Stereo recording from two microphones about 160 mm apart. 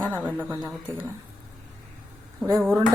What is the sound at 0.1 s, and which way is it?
Speech, 10° right (ahead or behind).